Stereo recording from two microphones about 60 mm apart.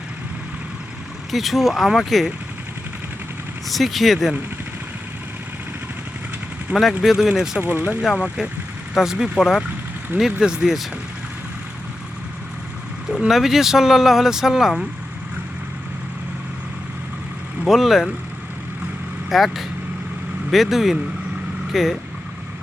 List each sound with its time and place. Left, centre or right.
1.3 s speech: centre
3.7 s speech: centre
7.0 s speech: centre
7.6 s speech: right
13.1 s speech: centre
17.7 s speech: centre
19.3 s speech: centre